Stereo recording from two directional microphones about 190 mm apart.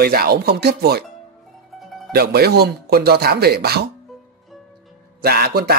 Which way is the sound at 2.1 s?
55° right (ahead or behind).